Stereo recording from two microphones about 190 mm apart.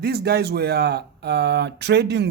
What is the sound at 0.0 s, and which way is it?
Speech, 55° right (ahead or behind).